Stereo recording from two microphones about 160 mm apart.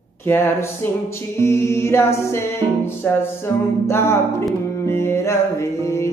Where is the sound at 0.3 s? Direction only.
15° left (ahead or behind).